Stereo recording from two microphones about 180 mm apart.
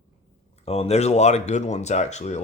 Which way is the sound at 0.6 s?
35° left (ahead or behind).